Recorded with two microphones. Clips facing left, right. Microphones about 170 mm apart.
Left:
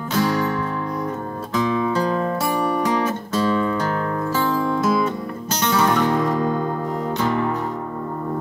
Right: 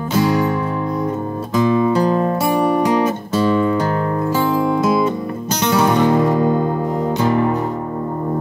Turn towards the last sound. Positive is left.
turn(degrees=-20)  # may be behind; listen again after turning